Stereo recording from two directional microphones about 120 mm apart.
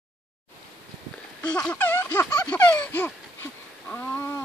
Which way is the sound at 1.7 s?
15° left (ahead or behind).